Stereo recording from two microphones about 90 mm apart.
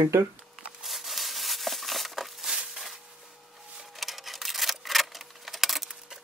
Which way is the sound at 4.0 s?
Centre (ahead or behind).